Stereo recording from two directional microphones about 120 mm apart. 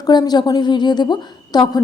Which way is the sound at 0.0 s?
35° left (ahead or behind).